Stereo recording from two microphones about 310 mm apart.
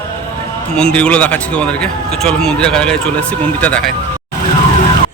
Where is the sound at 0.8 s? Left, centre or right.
Centre.